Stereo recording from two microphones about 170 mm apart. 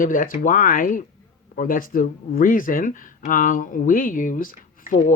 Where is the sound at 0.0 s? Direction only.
50° left (ahead or behind).